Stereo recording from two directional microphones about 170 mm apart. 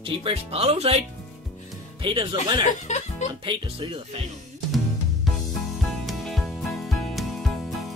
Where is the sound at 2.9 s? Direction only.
45° left (ahead or behind).